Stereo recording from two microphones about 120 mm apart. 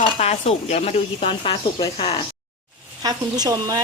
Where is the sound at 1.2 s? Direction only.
45° left (ahead or behind).